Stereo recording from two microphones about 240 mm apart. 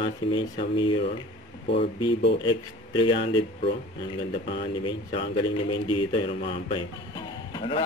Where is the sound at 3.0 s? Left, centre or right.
Left.